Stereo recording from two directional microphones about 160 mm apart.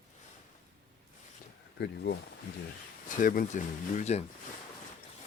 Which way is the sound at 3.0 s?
60° left (ahead or behind).